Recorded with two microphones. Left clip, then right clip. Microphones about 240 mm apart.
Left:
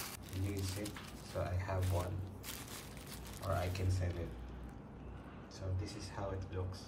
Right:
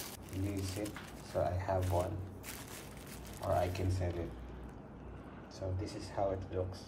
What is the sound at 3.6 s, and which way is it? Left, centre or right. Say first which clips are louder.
Speech: right 6 dB; centre.